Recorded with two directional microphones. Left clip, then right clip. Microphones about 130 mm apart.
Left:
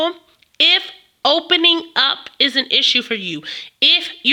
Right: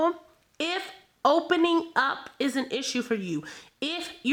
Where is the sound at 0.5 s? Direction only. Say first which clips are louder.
Left 16 dB; centre (ahead or behind).